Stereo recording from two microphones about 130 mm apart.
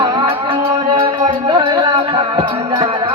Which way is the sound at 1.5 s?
40° right (ahead or behind).